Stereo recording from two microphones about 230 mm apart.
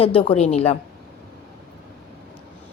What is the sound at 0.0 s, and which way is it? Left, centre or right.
Speech, left.